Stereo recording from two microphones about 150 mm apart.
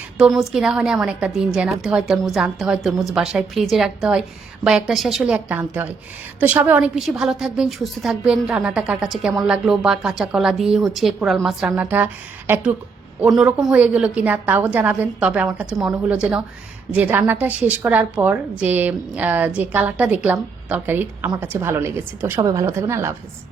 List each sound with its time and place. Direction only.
0.2 s a woman's voice: centre (ahead or behind)
13.2 s a woman's voice: 5° right (ahead or behind)